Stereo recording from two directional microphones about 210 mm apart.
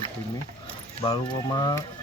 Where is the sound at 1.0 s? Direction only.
25° left (ahead or behind).